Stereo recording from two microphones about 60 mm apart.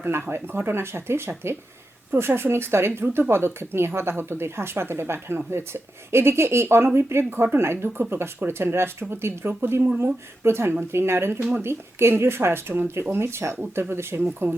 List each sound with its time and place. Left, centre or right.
0.0 s speech: right